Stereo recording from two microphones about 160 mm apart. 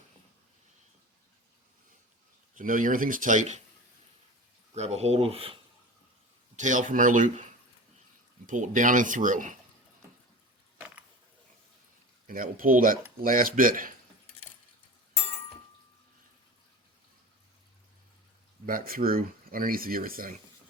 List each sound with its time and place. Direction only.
2.6 s speech: 55° right (ahead or behind)
4.7 s speech: 45° right (ahead or behind)
6.6 s speech: 50° right (ahead or behind)
8.4 s speech: 55° right (ahead or behind)
12.3 s speech: 60° right (ahead or behind)
18.6 s speech: 60° right (ahead or behind)